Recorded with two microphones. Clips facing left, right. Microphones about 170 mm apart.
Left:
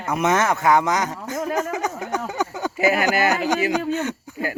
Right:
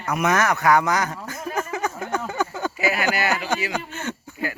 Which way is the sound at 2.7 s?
50° left (ahead or behind).